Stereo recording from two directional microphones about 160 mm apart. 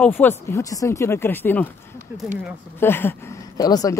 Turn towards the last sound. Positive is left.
turn(degrees=25)  # may be behind; listen again after turning